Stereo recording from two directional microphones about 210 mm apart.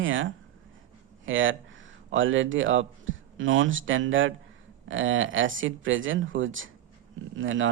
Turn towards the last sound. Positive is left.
turn(degrees=-65)  # may be behind; listen again after turning